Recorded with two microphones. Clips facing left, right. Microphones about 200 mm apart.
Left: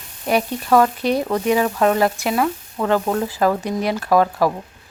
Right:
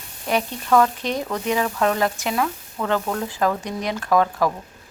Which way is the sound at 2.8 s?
30° left (ahead or behind).